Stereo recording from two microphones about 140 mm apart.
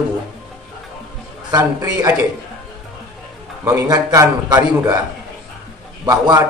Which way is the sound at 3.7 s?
25° right (ahead or behind).